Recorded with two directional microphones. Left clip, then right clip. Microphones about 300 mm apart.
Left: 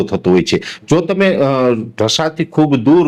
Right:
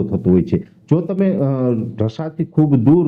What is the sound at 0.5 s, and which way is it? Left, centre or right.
Speech, left.